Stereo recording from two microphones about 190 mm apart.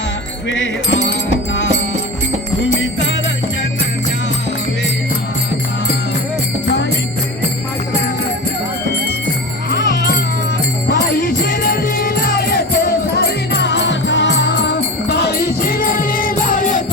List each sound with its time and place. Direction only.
0.5 s music: 85° left
9.7 s music: 60° left (ahead or behind)
10.8 s music: 50° left (ahead or behind)